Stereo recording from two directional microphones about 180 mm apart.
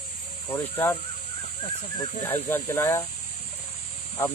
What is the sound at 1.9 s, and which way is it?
Speech, 25° left (ahead or behind).